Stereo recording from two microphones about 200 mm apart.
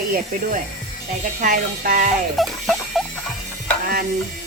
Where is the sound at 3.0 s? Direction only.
Centre (ahead or behind).